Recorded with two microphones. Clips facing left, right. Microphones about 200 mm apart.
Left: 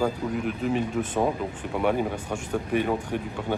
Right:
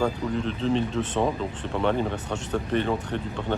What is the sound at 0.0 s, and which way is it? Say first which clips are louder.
Speech: even; 10° left (ahead or behind).